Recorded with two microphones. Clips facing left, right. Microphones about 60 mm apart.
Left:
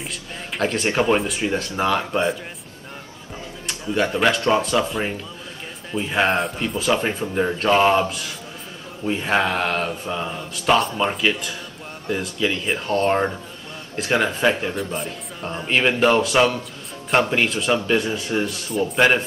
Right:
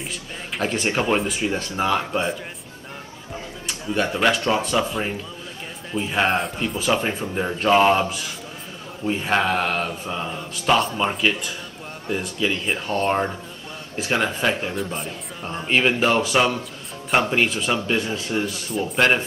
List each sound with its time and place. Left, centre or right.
0.7 s speech: centre
0.9 s speech: centre
3.6 s speech: centre
9.0 s speech: centre
14.1 s speech: centre
17.6 s speech: centre